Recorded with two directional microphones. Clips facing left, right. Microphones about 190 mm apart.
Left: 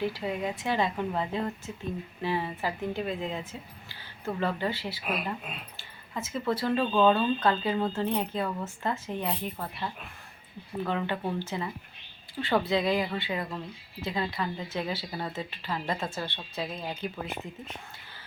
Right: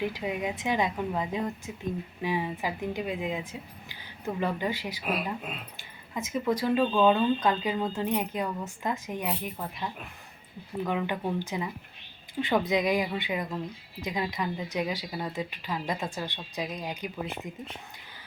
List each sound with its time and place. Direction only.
0.0 s speech: 15° right (ahead or behind)